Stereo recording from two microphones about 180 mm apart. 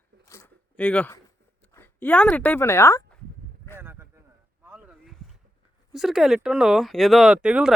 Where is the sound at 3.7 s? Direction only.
15° right (ahead or behind).